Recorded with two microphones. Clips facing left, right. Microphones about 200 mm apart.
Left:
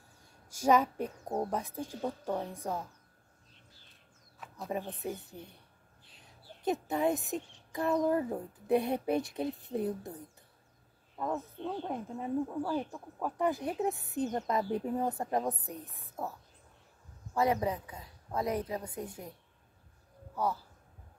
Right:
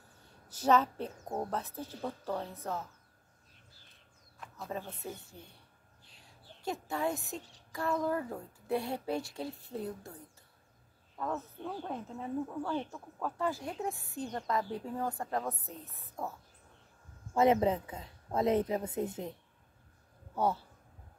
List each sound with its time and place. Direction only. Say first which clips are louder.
0.2 s a woman's voice: left 2 dB; 10° left (ahead or behind)
4.6 s speech: left 4 dB; 15° left (ahead or behind)
11.1 s speech: left 2 dB; 15° left (ahead or behind)
17.3 s a woman's voice: right 3 dB; 20° right (ahead or behind)
20.3 s a woman's voice: right 2 dB; 25° right (ahead or behind)